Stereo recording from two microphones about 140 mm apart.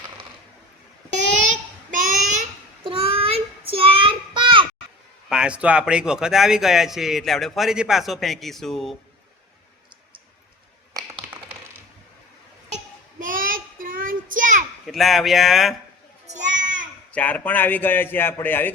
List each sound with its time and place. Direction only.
1.9 s babbling: 65° right (ahead or behind)
2.8 s child singing: 40° right (ahead or behind)
5.3 s a man's voice: 5° right (ahead or behind)
10.9 s tap: 25° right (ahead or behind)
12.7 s child singing: 70° right (ahead or behind)
14.8 s a man's voice: centre (ahead or behind)
16.2 s children playing: 60° right (ahead or behind)
17.1 s a man's voice: 10° left (ahead or behind)